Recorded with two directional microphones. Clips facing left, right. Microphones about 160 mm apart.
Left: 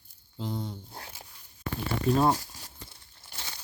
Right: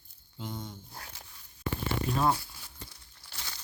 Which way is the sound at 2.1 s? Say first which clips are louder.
Left 2 dB; 35° left (ahead or behind).